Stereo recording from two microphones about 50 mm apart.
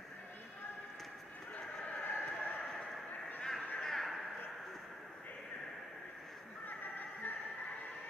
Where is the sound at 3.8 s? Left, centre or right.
Centre.